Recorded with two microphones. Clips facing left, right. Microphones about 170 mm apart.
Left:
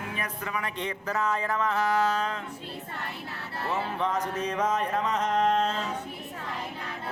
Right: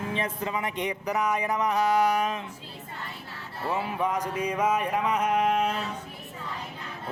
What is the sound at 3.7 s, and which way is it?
Speech, 10° right (ahead or behind).